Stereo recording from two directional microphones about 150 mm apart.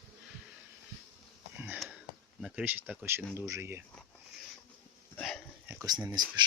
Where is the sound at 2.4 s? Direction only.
10° right (ahead or behind).